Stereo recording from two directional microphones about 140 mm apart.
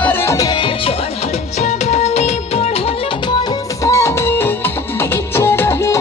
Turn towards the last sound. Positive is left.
turn(degrees=20)  # may be behind; listen again after turning